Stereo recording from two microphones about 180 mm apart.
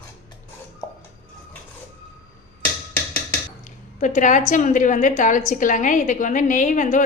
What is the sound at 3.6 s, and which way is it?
A woman's voice, 45° left (ahead or behind).